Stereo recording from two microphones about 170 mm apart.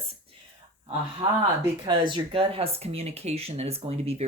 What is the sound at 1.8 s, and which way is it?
Speech, 30° right (ahead or behind).